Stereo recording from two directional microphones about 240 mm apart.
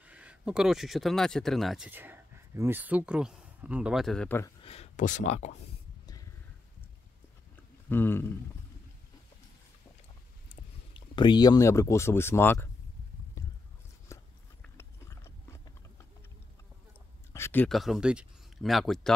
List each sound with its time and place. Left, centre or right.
0.0 s speech: centre
4.6 s speech: left
7.9 s speech: centre
10.5 s speech: left
13.4 s a sound: centre
14.0 s biting: centre
17.3 s speech: centre